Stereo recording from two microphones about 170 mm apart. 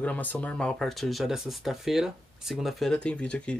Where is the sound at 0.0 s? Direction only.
10° left (ahead or behind).